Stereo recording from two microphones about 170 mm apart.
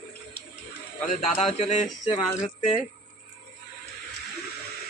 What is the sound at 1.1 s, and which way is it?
Speech, 45° left (ahead or behind).